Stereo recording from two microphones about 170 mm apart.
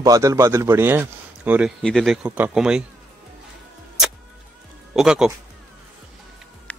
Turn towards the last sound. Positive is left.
turn(degrees=10)  # may be behind; listen again after turning